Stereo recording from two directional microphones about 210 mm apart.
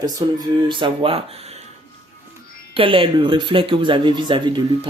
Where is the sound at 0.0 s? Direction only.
20° right (ahead or behind).